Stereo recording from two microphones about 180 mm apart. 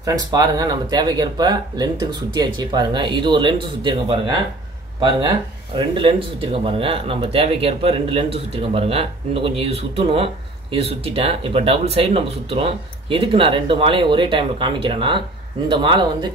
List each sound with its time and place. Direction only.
0.0 s speech: 20° right (ahead or behind)
5.8 s speech: 30° right (ahead or behind)